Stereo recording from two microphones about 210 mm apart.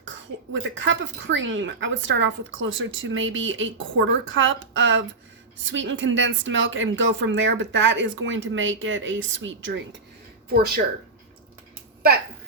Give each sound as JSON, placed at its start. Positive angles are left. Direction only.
{"t": 0.5, "sound": "speech", "side_deg": -60}
{"t": 10.5, "sound": "speech", "side_deg": -50}